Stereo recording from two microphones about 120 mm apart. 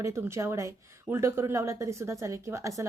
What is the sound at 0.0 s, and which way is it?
A woman's voice, 25° right (ahead or behind).